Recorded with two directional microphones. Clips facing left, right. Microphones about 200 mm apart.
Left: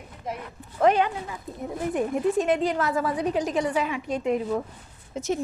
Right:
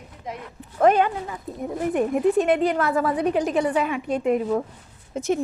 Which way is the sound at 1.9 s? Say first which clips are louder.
Right 4 dB; 60° right (ahead or behind).